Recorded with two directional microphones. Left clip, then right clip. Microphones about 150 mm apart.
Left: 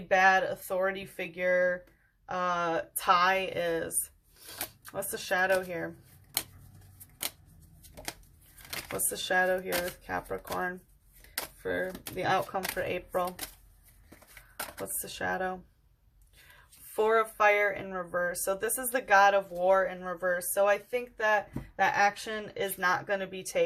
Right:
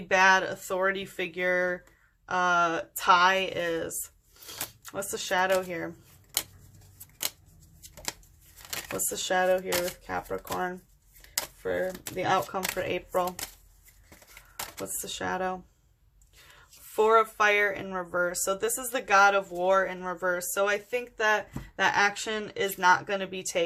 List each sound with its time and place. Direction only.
0.1 s speech: 30° right (ahead or behind)
6.3 s a sound: 10° right (ahead or behind)
7.8 s a sound: 10° right (ahead or behind)
8.9 s speech: 15° right (ahead or behind)
14.5 s speech: 20° right (ahead or behind)
16.9 s speech: 20° right (ahead or behind)